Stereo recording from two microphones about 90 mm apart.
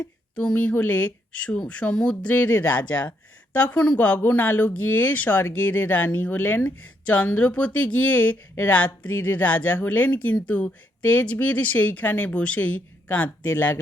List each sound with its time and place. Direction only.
0.3 s speech: 10° left (ahead or behind)